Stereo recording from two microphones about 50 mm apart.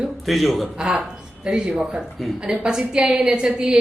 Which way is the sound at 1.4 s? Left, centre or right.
Centre.